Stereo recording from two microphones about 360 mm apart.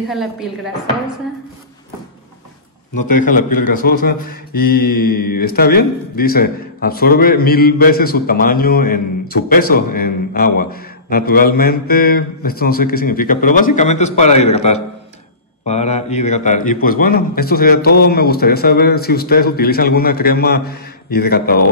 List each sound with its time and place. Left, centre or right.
0.1 s speech: centre
3.0 s speech: left